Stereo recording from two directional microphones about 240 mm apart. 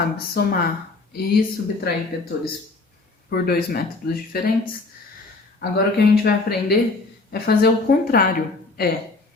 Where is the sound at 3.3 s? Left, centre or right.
Left.